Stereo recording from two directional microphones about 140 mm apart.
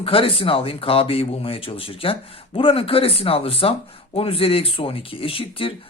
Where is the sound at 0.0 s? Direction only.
40° left (ahead or behind).